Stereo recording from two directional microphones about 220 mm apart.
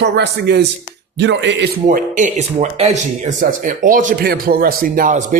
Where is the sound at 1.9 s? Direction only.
35° right (ahead or behind).